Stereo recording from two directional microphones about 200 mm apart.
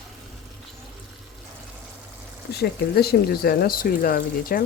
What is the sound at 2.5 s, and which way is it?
Speech, 55° left (ahead or behind).